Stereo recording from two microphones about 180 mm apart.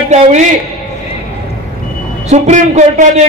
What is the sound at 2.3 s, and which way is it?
Speech, 40° right (ahead or behind).